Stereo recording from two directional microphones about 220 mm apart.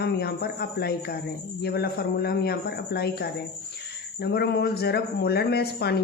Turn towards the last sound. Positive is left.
turn(degrees=45)  # may be behind; listen again after turning